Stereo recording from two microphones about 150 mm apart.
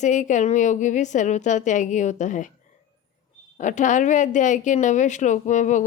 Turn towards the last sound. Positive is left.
turn(degrees=55)  # may be behind; listen again after turning